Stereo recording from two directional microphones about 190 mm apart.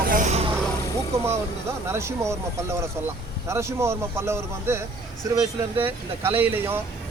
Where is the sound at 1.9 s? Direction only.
15° right (ahead or behind).